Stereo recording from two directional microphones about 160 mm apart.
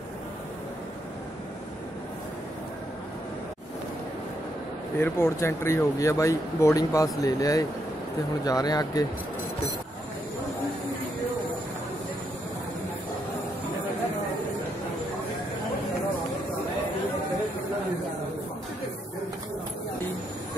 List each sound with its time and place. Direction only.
4.9 s speech: 15° left (ahead or behind)